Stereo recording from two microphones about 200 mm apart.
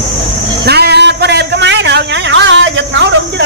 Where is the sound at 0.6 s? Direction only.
55° right (ahead or behind).